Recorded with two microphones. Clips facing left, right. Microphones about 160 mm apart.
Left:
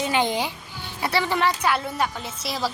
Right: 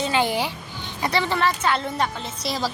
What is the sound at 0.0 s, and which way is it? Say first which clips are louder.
A child's voice: right 1 dB; 20° left (ahead or behind).